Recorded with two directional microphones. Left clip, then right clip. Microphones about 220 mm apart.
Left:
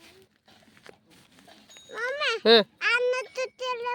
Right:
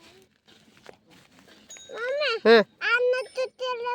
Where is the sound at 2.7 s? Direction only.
10° left (ahead or behind).